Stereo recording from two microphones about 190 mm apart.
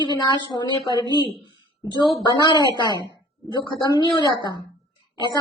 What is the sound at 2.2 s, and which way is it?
A man's voice, 25° left (ahead or behind).